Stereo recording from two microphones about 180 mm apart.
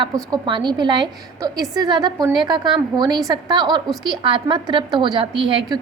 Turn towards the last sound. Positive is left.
turn(degrees=-30)  # may be behind; listen again after turning